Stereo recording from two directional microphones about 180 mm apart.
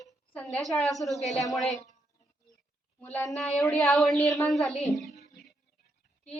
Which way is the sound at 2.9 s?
10° left (ahead or behind).